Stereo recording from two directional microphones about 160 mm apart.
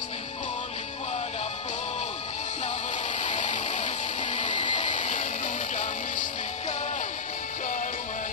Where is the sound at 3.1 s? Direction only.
50° left (ahead or behind).